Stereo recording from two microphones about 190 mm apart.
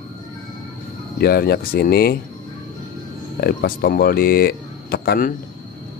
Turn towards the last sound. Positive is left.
turn(degrees=50)  # may be behind; listen again after turning